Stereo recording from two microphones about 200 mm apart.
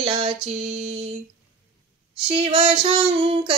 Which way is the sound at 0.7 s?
30° right (ahead or behind).